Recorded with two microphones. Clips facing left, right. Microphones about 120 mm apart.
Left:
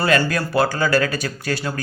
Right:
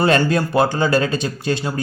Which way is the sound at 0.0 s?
25° right (ahead or behind).